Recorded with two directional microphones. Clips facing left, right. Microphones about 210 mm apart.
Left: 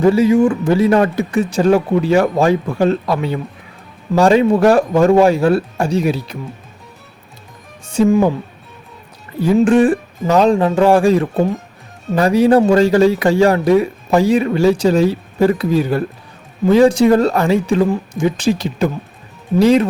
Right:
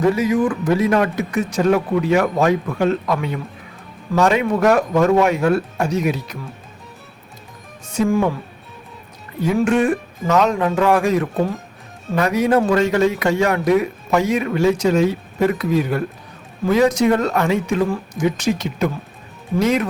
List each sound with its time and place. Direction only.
0.1 s speech: 30° left (ahead or behind)
7.9 s a woman's voice: 25° left (ahead or behind)
9.6 s speech: 30° left (ahead or behind)